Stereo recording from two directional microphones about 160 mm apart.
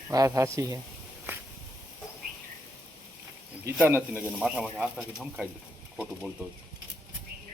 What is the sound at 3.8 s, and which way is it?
Speech, 15° right (ahead or behind).